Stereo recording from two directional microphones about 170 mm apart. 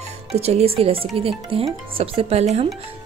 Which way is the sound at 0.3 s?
40° right (ahead or behind).